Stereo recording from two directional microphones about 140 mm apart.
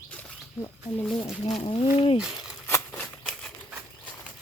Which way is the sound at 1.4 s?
45° left (ahead or behind).